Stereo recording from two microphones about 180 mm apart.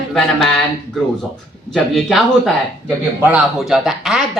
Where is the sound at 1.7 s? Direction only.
Centre (ahead or behind).